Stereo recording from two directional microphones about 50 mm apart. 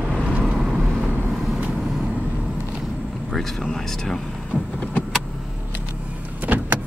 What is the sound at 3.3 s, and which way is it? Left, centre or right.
Speech, centre.